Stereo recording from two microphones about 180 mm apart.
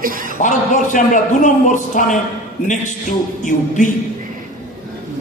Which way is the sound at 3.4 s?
45° left (ahead or behind).